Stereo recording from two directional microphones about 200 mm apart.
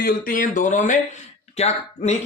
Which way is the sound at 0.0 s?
45° left (ahead or behind).